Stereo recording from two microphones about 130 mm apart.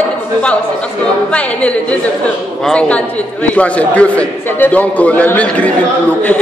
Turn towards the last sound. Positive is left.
turn(degrees=10)  # may be behind; listen again after turning